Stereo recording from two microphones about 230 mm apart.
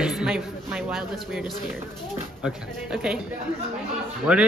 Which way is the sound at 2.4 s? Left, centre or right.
Centre.